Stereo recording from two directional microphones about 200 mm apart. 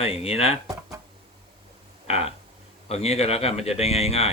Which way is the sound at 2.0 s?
30° left (ahead or behind).